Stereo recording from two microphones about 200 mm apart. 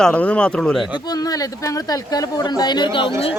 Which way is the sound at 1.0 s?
20° left (ahead or behind).